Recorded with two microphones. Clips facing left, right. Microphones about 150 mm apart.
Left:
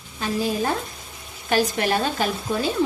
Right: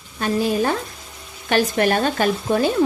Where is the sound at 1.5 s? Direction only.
55° right (ahead or behind).